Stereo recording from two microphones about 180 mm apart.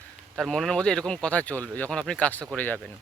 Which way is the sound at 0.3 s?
Centre (ahead or behind).